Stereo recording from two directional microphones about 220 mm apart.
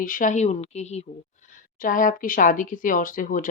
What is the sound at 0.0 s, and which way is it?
Speech, 35° left (ahead or behind).